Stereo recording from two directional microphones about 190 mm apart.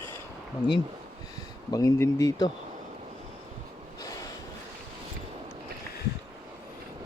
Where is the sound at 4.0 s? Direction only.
20° left (ahead or behind).